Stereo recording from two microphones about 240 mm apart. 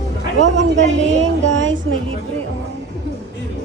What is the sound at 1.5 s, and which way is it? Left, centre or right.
Speech, right.